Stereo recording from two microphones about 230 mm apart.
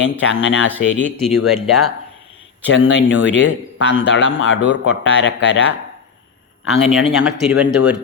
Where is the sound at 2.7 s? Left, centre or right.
Left.